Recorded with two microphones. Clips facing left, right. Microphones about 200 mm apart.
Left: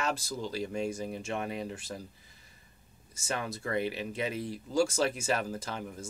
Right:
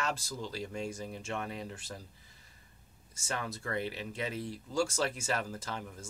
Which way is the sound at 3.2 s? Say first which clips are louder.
Left 3 dB; 15° left (ahead or behind).